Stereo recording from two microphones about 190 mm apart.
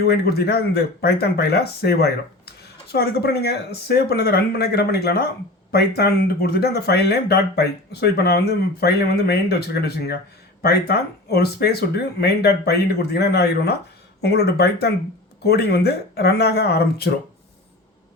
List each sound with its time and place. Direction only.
0.0 s speech: 55° left (ahead or behind)